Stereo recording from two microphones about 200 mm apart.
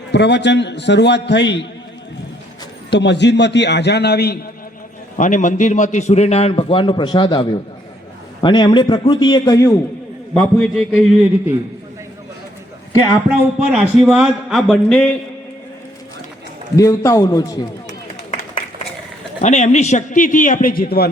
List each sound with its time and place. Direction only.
0.1 s a man's voice: 60° left (ahead or behind)
2.9 s a man's voice: 60° left (ahead or behind)
5.1 s a man's voice: 40° left (ahead or behind); by 9.7 s 15° left (ahead or behind)
10.3 s speech: centre (ahead or behind)
13.4 s speech: 5° right (ahead or behind)
16.7 s a man's voice: 15° left (ahead or behind)
19.4 s a man's voice: 35° left (ahead or behind)